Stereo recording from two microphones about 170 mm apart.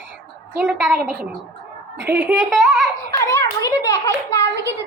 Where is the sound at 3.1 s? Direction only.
15° left (ahead or behind).